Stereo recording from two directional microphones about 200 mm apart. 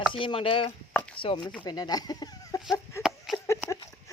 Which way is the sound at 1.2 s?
25° left (ahead or behind).